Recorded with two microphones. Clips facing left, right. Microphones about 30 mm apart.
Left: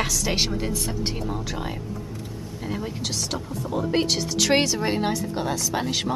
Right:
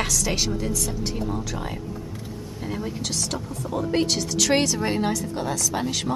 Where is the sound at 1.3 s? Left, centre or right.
Centre.